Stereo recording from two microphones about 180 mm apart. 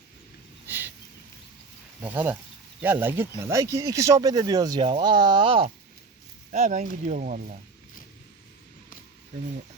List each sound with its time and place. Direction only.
0.7 s a sound: 10° right (ahead or behind)
2.0 s speech: 10° right (ahead or behind); by 5.7 s 30° right (ahead or behind)
6.5 s speech: 40° right (ahead or behind)